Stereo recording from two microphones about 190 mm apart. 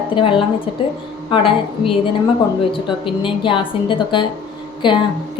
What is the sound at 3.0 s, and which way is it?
A woman's voice, 25° left (ahead or behind).